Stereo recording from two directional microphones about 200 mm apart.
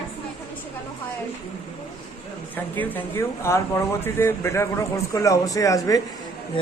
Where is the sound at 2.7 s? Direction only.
10° left (ahead or behind).